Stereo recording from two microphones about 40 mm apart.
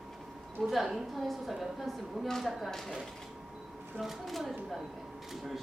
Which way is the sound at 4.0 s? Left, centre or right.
Centre.